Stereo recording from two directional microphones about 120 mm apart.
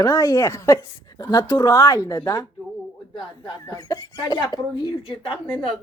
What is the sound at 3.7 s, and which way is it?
Speech, 30° left (ahead or behind).